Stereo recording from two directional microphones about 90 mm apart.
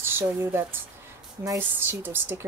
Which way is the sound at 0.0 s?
30° right (ahead or behind).